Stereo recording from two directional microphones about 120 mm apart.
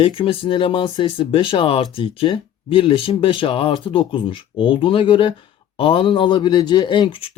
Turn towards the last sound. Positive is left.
turn(degrees=45)  # may be behind; listen again after turning